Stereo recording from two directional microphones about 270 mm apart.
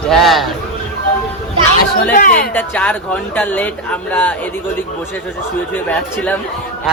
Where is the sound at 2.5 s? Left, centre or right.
Centre.